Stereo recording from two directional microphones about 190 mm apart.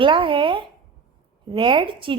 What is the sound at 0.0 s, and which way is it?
A woman's voice, 25° right (ahead or behind).